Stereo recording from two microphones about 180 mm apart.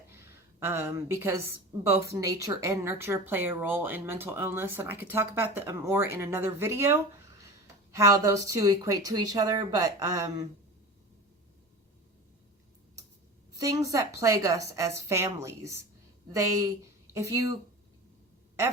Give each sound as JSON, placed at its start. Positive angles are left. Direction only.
{"t": 0.1, "sound": "a woman's voice", "side_deg": -15}
{"t": 13.5, "sound": "speech", "side_deg": -20}